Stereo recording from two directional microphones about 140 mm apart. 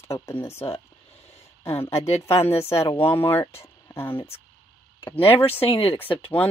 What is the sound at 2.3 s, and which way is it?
Speech, 20° left (ahead or behind).